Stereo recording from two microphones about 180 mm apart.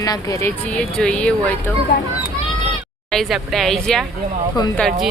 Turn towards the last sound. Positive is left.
turn(degrees=0)  # may be behind; listen again after turning